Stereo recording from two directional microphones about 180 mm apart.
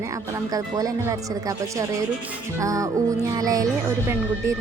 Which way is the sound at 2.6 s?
20° right (ahead or behind).